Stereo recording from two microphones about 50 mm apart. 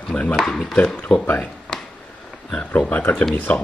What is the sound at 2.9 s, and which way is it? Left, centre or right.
Speech, left.